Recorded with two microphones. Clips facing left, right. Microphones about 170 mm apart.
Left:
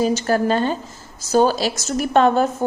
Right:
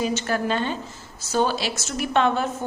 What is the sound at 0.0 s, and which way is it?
A woman's voice, 35° left (ahead or behind).